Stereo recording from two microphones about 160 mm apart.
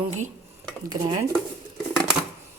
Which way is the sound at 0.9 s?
45° right (ahead or behind).